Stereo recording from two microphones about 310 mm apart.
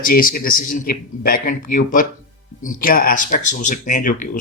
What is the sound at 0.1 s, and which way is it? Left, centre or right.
Speech, left.